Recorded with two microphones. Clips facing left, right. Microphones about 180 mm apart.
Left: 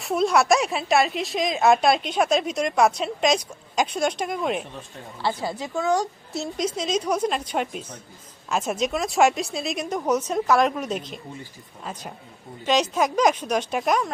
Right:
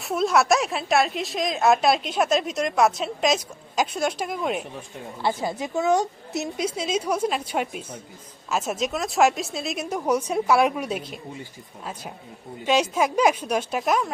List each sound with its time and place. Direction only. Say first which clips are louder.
0.0 s a woman's voice: left 1 dB; centre (ahead or behind)
5.2 s a woman's voice: right 1 dB; 20° right (ahead or behind)
6.6 s a woman's voice: left 2 dB; 10° right (ahead or behind)
12.6 s a woman's voice: even; 10° right (ahead or behind)